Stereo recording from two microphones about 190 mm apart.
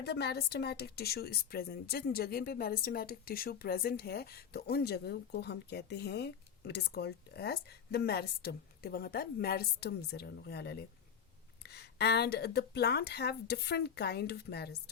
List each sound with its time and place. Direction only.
0.0 s speech: 60° left (ahead or behind)